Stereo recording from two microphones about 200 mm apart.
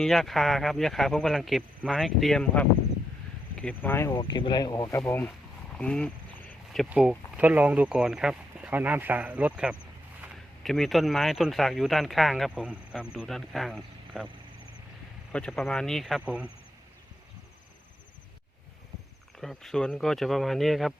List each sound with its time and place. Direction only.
0.0 s speech: centre (ahead or behind)
4.1 s speech: 25° left (ahead or behind)
5.8 s a sound: 5° left (ahead or behind)
6.9 s speech: 5° right (ahead or behind)
15.3 s speech: 5° left (ahead or behind)
19.4 s speech: centre (ahead or behind)